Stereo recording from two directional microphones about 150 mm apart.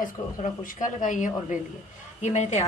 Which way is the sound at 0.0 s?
60° left (ahead or behind).